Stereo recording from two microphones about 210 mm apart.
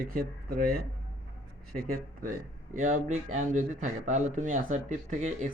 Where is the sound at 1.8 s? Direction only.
40° right (ahead or behind).